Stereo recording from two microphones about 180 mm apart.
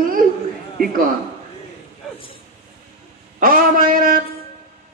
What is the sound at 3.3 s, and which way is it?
Speech, 50° right (ahead or behind).